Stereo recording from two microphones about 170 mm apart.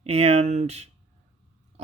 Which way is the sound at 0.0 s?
35° right (ahead or behind).